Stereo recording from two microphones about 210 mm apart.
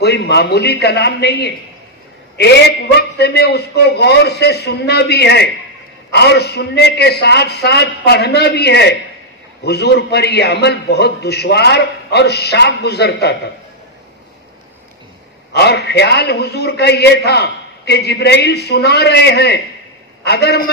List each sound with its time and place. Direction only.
0.0 s a man's voice: 50° left (ahead or behind)
3.0 s a man's voice: 50° left (ahead or behind)
15.5 s a man's voice: 50° left (ahead or behind)